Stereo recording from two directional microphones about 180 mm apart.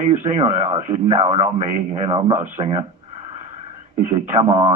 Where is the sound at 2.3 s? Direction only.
45° right (ahead or behind).